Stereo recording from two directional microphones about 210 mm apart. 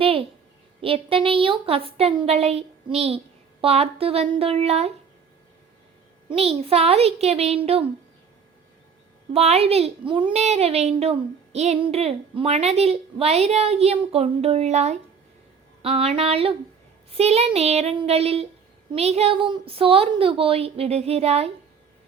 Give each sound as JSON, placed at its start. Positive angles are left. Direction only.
{"t": 0.0, "sound": "a sound", "side_deg": -25}
{"t": 0.8, "sound": "speech", "side_deg": -25}
{"t": 6.2, "sound": "speech", "side_deg": -30}
{"t": 9.3, "sound": "speech", "side_deg": -30}